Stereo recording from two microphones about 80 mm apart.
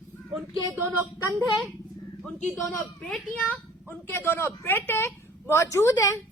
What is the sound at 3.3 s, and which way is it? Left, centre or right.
A child's voice, left.